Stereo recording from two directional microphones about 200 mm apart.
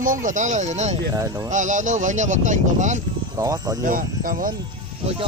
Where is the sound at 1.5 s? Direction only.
40° right (ahead or behind).